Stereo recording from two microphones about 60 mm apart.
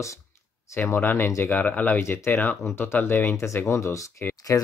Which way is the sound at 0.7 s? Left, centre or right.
Left.